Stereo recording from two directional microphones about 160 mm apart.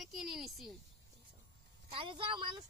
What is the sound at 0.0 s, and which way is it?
Speech, centre (ahead or behind).